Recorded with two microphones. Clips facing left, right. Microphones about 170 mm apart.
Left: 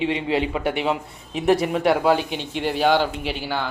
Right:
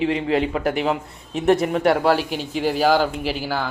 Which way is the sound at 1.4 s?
Centre (ahead or behind).